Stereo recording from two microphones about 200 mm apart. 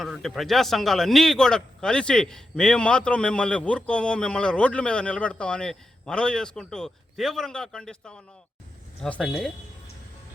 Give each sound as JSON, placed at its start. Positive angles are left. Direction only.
{"t": 0.0, "sound": "a man's voice", "side_deg": 0}